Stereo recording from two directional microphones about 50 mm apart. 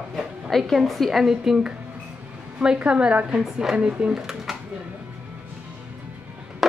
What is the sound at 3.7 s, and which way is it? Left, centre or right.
Speech, centre.